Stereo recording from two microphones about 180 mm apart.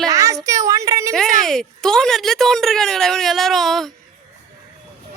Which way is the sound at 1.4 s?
Centre (ahead or behind).